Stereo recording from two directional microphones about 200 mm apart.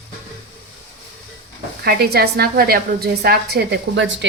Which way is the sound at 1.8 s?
50° right (ahead or behind).